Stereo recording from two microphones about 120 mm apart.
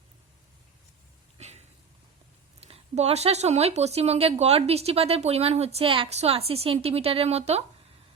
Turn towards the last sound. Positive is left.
turn(degrees=-60)  # may be behind; listen again after turning